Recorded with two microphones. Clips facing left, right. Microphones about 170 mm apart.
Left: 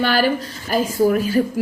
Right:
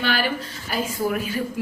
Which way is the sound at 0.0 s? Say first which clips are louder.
Left 6 dB; 40° left (ahead or behind).